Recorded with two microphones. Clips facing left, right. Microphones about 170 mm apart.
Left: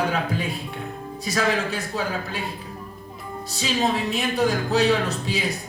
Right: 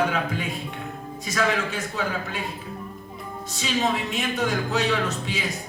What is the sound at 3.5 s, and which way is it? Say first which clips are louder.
Speech: left 1 dB; 35° left (ahead or behind).